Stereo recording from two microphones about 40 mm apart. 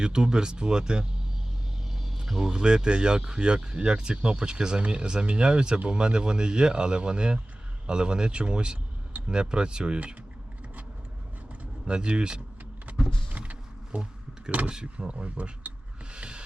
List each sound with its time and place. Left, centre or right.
0.0 s speech: right
2.4 s speech: centre
11.9 s speech: right
13.3 s vehicle: right
14.7 s speech: right
16.1 s a sound: right